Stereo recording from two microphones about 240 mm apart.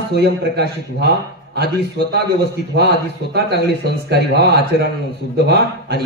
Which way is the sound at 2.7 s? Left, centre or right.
Right.